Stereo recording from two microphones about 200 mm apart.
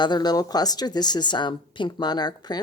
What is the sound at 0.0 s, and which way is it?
Speech, 20° left (ahead or behind).